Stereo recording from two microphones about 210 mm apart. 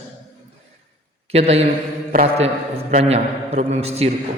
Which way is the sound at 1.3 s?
30° right (ahead or behind).